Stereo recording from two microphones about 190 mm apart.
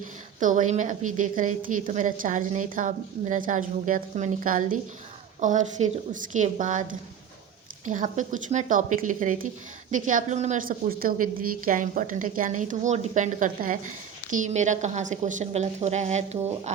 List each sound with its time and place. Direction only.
0.3 s a woman's voice: 40° right (ahead or behind)